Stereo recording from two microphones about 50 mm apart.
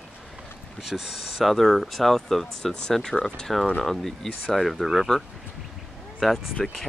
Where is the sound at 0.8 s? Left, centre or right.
Centre.